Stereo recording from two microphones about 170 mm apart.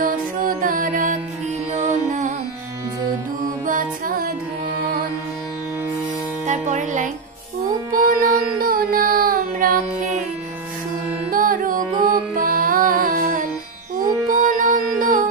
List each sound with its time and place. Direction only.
0.0 s music: 55° right (ahead or behind)
3.6 s music: 50° right (ahead or behind)
6.4 s music: 45° right (ahead or behind)
7.9 s music: 55° right (ahead or behind)
11.2 s music: 55° right (ahead or behind)